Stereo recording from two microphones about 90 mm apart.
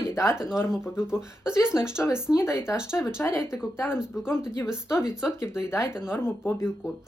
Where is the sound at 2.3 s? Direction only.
30° left (ahead or behind).